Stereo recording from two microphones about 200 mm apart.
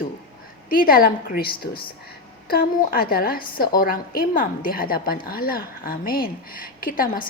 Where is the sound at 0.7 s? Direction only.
45° left (ahead or behind).